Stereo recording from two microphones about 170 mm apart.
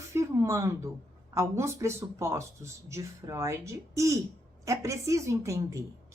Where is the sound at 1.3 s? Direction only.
15° right (ahead or behind).